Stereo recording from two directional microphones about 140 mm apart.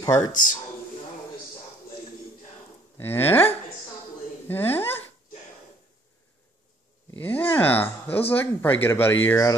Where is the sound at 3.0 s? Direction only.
15° left (ahead or behind).